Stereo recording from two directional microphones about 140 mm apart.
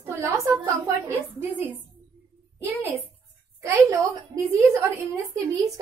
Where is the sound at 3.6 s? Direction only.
25° right (ahead or behind).